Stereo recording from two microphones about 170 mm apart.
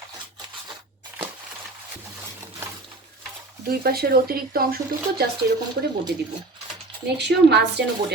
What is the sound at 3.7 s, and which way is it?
A woman's voice, 65° right (ahead or behind).